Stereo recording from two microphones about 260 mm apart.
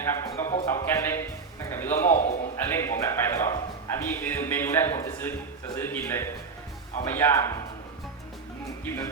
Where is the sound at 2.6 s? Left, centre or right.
Centre.